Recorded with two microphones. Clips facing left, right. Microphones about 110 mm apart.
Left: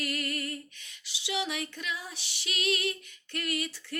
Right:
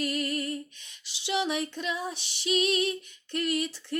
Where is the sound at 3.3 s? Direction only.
30° right (ahead or behind).